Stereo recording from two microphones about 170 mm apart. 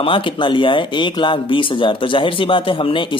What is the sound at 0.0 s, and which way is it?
A man's voice, 30° left (ahead or behind).